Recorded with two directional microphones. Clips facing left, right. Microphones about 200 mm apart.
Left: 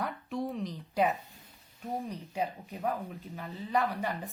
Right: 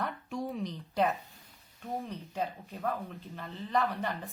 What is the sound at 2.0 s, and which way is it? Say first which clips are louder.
Speech: left 1 dB; 15° left (ahead or behind).